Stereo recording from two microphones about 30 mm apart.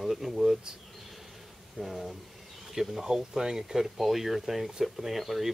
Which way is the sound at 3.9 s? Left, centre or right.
Centre.